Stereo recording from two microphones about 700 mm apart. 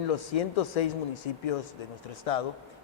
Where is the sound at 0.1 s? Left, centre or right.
Left.